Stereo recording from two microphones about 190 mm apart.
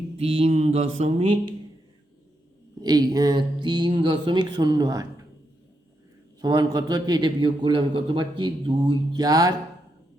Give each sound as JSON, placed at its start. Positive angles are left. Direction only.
{"t": 0.2, "sound": "mantra", "side_deg": -30}
{"t": 2.8, "sound": "a man's voice", "side_deg": -20}
{"t": 6.4, "sound": "a man's voice", "side_deg": -25}